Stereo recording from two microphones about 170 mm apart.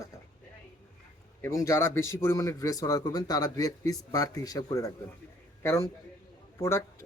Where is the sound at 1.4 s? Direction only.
15° left (ahead or behind).